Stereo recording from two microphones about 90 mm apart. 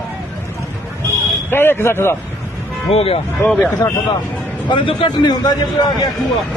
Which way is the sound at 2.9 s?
90° left.